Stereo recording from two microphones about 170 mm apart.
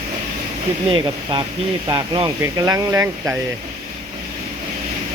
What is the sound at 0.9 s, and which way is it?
Speech, 30° right (ahead or behind).